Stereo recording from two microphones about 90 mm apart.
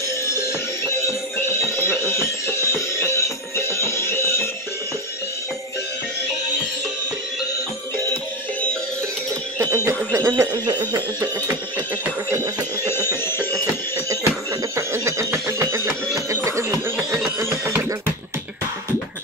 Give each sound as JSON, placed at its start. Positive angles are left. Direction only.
{"t": 1.0, "sound": "music", "side_deg": 30}
{"t": 9.8, "sound": "a sound", "side_deg": -30}
{"t": 10.5, "sound": "speech", "side_deg": -50}
{"t": 12.5, "sound": "speech", "side_deg": -40}
{"t": 13.1, "sound": "music", "side_deg": 25}
{"t": 13.5, "sound": "music", "side_deg": -40}
{"t": 14.8, "sound": "speech", "side_deg": -35}
{"t": 16.3, "sound": "a sound", "side_deg": -35}